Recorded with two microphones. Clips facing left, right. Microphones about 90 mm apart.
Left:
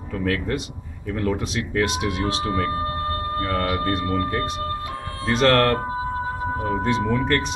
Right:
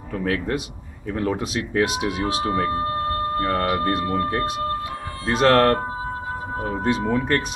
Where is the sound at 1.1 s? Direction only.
20° right (ahead or behind).